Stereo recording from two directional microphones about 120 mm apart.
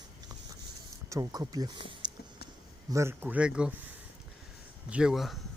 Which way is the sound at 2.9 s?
25° right (ahead or behind).